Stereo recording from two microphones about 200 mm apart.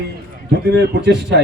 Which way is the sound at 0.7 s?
55° right (ahead or behind).